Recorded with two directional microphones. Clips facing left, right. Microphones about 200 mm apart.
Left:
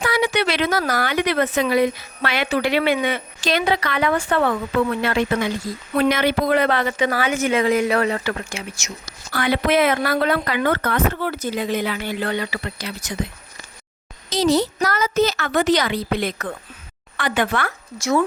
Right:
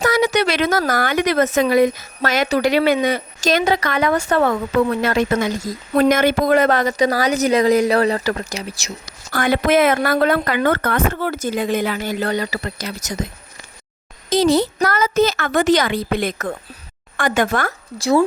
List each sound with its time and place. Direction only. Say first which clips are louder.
0.0 s speech: right 4 dB; 40° right (ahead or behind)
9.3 s speech: right 3 dB; 45° right (ahead or behind)
14.3 s speech: right 3 dB; 55° right (ahead or behind); by 18.2 s 35° right (ahead or behind)